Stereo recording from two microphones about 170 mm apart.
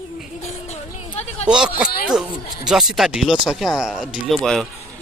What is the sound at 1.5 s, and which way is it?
Speech, 5° right (ahead or behind).